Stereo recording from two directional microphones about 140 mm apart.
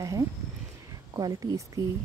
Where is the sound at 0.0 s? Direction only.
20° right (ahead or behind).